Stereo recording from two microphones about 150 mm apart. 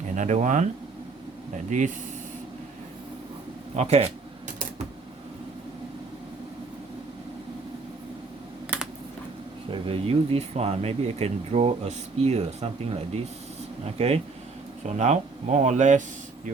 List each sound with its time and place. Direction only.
0.2 s speech: 50° right (ahead or behind)
3.8 s speech: 45° right (ahead or behind)
9.6 s speech: 35° right (ahead or behind); by 16.0 s 55° right (ahead or behind)